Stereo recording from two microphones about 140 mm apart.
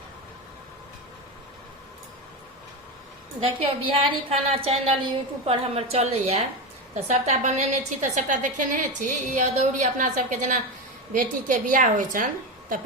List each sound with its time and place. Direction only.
3.4 s a woman's voice: 40° right (ahead or behind); by 12.8 s 75° right (ahead or behind)